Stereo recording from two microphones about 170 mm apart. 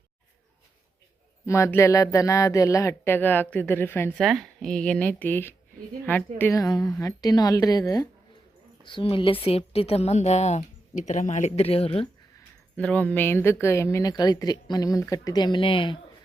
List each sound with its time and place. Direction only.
1.5 s speech: 15° left (ahead or behind)
4.2 s a woman's voice: centre (ahead or behind); by 12.0 s 35° left (ahead or behind)
12.4 s speech: 10° left (ahead or behind); by 16.0 s 30° left (ahead or behind)